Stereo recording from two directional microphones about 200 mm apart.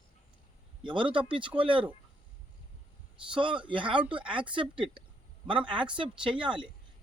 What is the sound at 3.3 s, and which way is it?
Speech, 25° right (ahead or behind).